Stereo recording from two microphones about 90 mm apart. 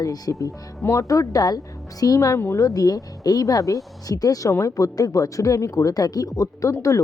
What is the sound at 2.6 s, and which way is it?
Speech, 45° left (ahead or behind).